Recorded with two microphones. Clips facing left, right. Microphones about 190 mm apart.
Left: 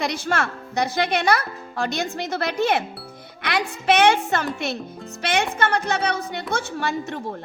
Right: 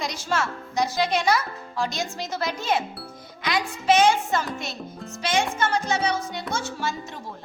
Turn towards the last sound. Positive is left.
turn(degrees=60)  # may be behind; listen again after turning